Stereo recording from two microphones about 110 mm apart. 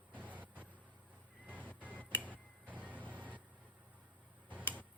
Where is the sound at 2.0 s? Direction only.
15° left (ahead or behind).